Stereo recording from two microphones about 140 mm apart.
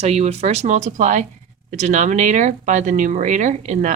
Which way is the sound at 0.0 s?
50° right (ahead or behind).